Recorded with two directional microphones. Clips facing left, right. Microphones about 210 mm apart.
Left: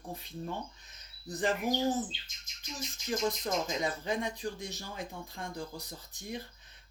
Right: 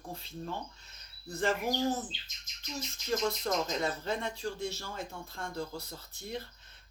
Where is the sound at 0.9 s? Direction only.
15° left (ahead or behind).